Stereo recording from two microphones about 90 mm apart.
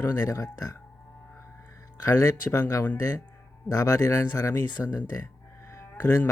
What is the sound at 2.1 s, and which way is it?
Speech, 35° left (ahead or behind).